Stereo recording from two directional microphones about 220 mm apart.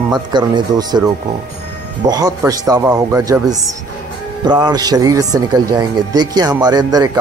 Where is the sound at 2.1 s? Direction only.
15° right (ahead or behind).